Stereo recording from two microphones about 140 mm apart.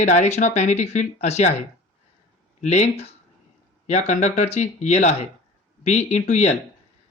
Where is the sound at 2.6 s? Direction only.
55° left (ahead or behind).